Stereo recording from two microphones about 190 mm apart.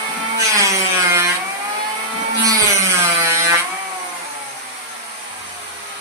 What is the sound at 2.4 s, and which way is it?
Sawing, 15° right (ahead or behind).